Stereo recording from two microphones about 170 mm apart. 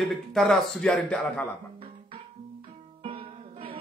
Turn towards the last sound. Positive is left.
turn(degrees=-30)  # may be behind; listen again after turning